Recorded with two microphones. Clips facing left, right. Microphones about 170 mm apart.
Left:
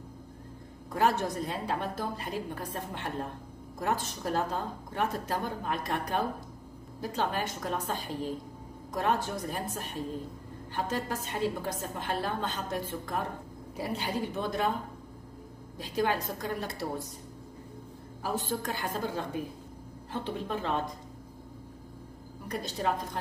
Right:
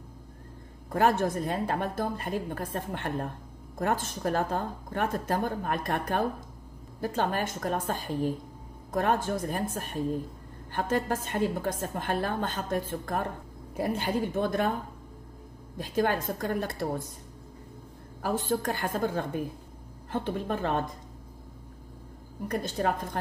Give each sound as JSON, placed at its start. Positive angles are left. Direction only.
{"t": 0.9, "sound": "a woman's voice", "side_deg": -50}
{"t": 15.8, "sound": "a woman's voice", "side_deg": -50}
{"t": 18.2, "sound": "a woman's voice", "side_deg": -50}
{"t": 22.5, "sound": "a woman's voice", "side_deg": -50}